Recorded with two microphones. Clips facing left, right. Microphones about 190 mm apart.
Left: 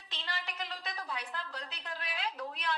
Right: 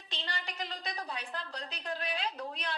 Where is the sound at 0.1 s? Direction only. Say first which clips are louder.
Right 1 dB; 30° right (ahead or behind).